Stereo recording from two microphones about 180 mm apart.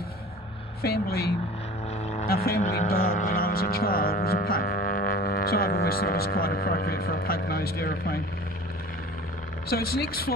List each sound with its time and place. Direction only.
0.8 s speech: 60° left (ahead or behind)
9.7 s speech: 60° left (ahead or behind)